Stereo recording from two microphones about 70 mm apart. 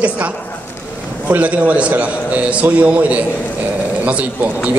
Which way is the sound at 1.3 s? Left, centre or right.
Right.